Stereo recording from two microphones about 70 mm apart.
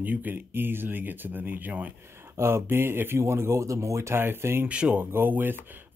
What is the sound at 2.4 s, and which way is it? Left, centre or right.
Speech, right.